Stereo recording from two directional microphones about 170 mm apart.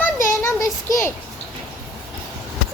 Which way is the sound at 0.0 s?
15° left (ahead or behind).